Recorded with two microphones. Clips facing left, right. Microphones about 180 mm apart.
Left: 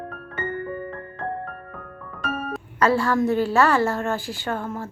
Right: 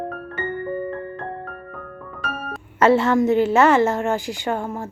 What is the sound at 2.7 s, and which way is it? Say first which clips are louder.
A woman's voice: right 4 dB; 25° right (ahead or behind).